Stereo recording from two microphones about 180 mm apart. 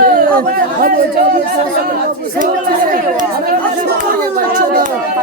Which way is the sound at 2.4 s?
50° right (ahead or behind).